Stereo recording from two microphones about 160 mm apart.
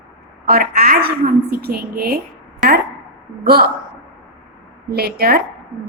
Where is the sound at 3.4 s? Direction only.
75° right (ahead or behind).